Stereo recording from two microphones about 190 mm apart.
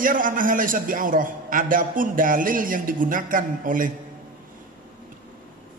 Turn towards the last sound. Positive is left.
turn(degrees=-45)  # may be behind; listen again after turning